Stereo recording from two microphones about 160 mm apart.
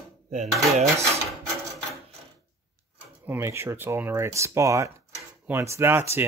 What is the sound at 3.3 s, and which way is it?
Speech, 15° right (ahead or behind).